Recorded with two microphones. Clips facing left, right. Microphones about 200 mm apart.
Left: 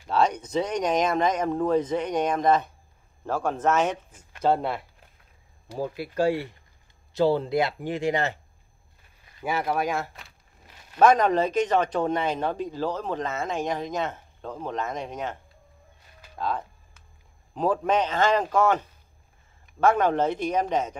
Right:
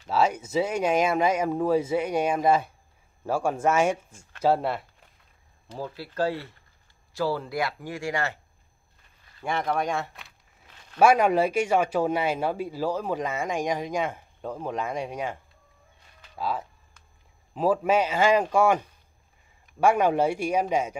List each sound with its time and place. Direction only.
0.1 s speech: 5° right (ahead or behind)
5.7 s speech: 15° left (ahead or behind)
9.4 s speech: 5° left (ahead or behind)
11.0 s speech: 10° right (ahead or behind)
16.3 s speech: 5° right (ahead or behind)